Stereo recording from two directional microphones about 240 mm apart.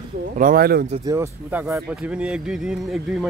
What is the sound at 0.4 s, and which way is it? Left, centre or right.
Speech, right.